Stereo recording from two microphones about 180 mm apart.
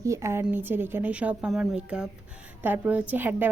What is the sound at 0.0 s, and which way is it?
A woman's voice, 15° right (ahead or behind).